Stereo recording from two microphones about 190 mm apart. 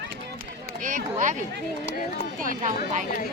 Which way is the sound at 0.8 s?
45° right (ahead or behind).